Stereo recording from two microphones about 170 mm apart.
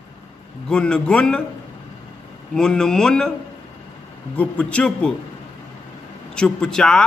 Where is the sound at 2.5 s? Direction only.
5° left (ahead or behind).